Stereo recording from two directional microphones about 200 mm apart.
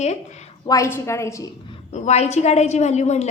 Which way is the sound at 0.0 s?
35° left (ahead or behind).